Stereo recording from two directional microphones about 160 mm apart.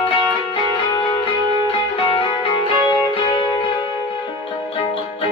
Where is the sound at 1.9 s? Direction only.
30° left (ahead or behind).